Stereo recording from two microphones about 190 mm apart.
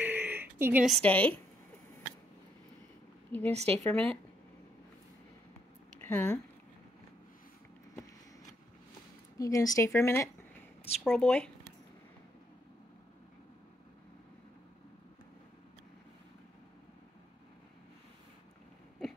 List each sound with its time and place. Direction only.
0.0 s a sound: 10° right (ahead or behind)
0.8 s speech: 5° left (ahead or behind)
3.3 s a woman's voice: 10° left (ahead or behind)
5.9 s speech: 10° left (ahead or behind)
9.4 s speech: 20° left (ahead or behind)
11.1 s speech: 5° left (ahead or behind)